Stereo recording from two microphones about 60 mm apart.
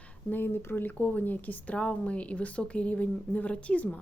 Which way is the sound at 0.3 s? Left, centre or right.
Left.